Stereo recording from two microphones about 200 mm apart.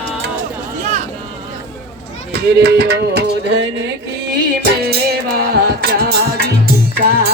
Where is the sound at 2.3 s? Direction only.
50° right (ahead or behind).